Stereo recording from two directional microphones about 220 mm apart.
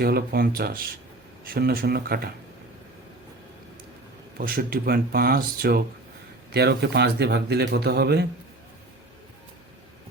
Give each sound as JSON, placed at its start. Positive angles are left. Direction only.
{"t": 0.0, "sound": "speech", "side_deg": -45}
{"t": 4.4, "sound": "speech", "side_deg": -40}